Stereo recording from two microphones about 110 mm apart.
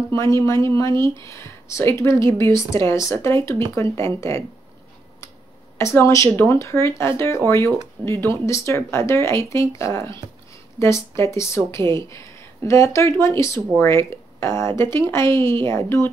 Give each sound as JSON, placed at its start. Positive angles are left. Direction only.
{"t": 0.1, "sound": "speech", "side_deg": 25}
{"t": 5.8, "sound": "speech", "side_deg": 25}